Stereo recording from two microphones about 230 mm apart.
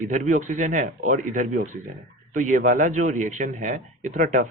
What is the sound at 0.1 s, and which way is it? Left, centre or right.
Speech, right.